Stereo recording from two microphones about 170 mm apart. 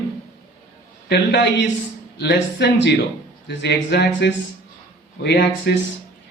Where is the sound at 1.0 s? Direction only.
85° left.